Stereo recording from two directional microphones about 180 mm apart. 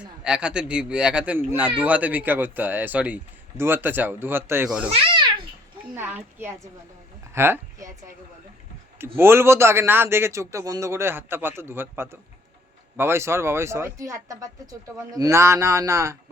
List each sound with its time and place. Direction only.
0.0 s speech: 5° right (ahead or behind)
4.9 s a child's voice: 30° right (ahead or behind)
6.0 s speech: 10° right (ahead or behind)
9.1 s speech: 15° right (ahead or behind)